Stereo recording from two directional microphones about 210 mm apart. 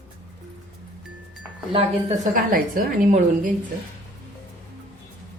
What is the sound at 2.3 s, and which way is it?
A woman's voice, 40° right (ahead or behind).